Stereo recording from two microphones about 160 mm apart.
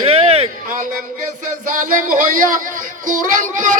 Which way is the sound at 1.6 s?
55° right (ahead or behind).